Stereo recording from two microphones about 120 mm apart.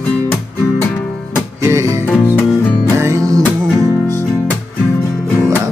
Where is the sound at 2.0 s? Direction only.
20° left (ahead or behind).